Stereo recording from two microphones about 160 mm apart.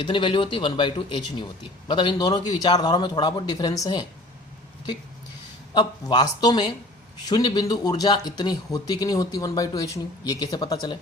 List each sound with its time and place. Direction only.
0.0 s speech: 30° left (ahead or behind)
5.7 s speech: 25° left (ahead or behind)